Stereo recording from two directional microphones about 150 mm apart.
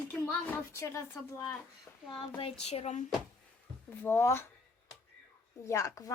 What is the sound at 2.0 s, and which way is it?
Speech, 40° left (ahead or behind).